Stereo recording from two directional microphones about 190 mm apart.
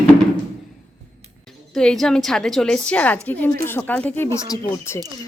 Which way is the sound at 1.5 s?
Centre (ahead or behind).